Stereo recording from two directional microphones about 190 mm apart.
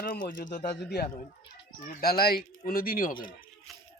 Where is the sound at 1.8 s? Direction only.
50° left (ahead or behind).